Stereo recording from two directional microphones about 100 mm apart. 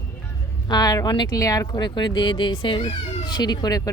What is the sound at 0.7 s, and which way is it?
Speech, 40° left (ahead or behind).